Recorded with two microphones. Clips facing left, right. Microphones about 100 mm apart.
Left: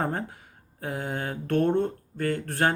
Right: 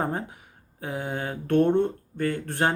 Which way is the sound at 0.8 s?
15° right (ahead or behind).